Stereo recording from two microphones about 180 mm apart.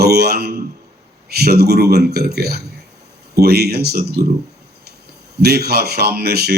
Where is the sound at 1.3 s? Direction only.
60° right (ahead or behind).